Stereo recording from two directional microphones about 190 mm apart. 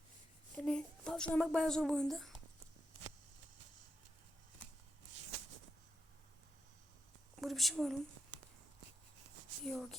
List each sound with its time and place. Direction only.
0.5 s speech: 5° left (ahead or behind)
7.4 s speech: centre (ahead or behind)
9.6 s speech: centre (ahead or behind)